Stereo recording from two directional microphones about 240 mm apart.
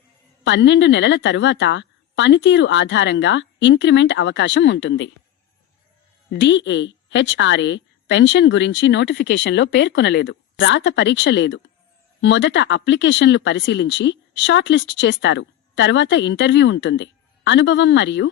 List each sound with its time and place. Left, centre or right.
0.4 s speech: left
6.3 s speech: left